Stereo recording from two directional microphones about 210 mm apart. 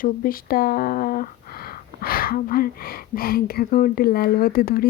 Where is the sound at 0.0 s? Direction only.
40° left (ahead or behind).